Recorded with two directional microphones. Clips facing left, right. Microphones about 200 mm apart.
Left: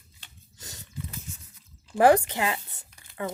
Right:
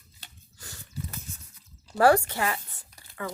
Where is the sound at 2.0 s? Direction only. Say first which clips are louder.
Left 1 dB; 20° left (ahead or behind).